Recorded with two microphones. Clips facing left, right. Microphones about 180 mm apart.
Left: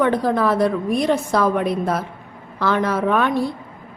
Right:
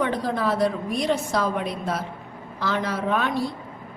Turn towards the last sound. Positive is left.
turn(degrees=55)  # may be behind; listen again after turning